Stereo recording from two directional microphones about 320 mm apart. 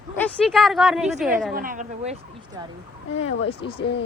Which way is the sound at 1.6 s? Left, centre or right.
Right.